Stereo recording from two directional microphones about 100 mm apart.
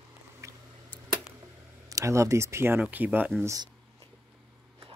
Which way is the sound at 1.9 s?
30° right (ahead or behind).